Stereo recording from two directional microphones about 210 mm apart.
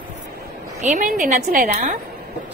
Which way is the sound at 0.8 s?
35° right (ahead or behind).